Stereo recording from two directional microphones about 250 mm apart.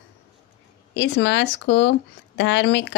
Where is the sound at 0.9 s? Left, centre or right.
Left.